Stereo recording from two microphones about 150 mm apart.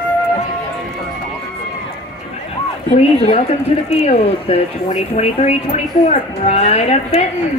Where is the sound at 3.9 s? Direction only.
50° left (ahead or behind).